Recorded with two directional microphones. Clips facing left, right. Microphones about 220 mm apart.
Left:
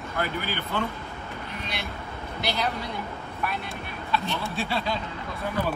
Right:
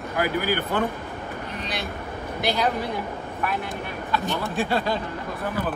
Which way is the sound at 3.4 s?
50° right (ahead or behind).